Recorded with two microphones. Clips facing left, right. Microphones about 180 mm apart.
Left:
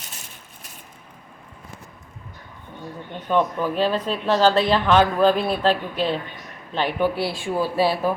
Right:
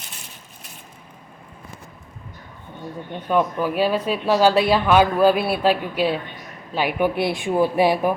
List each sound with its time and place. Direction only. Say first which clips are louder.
3.2 s speech: right 1 dB; 10° right (ahead or behind)